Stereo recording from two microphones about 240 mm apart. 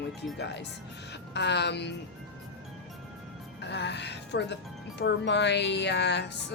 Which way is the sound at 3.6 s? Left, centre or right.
Left.